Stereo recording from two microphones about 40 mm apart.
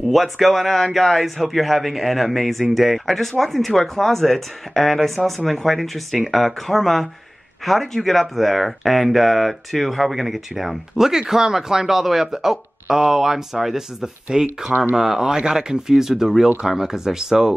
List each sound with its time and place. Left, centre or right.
0.1 s speech: centre